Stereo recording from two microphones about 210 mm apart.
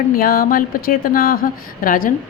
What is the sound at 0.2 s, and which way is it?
Speech, 45° left (ahead or behind).